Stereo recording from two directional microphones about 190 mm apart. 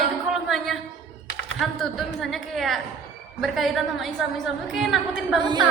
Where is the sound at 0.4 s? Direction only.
Centre (ahead or behind).